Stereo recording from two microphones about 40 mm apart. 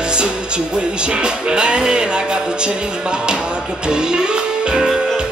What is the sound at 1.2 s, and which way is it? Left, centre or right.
Music, right.